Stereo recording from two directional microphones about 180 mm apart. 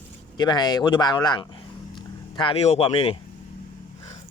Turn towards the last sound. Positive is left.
turn(degrees=30)  # may be behind; listen again after turning